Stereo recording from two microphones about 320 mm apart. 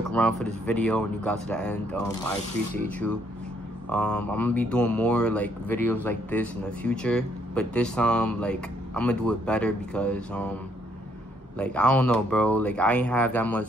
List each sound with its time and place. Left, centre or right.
0.1 s speech: centre
11.5 s speech: centre